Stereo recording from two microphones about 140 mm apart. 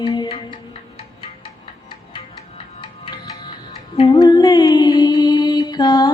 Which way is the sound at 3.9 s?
35° left (ahead or behind).